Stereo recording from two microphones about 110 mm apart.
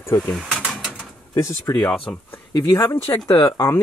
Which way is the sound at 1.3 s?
30° left (ahead or behind).